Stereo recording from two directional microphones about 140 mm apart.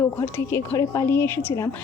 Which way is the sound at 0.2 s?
20° left (ahead or behind).